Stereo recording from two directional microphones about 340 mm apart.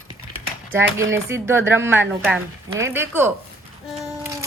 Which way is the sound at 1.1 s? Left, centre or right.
Centre.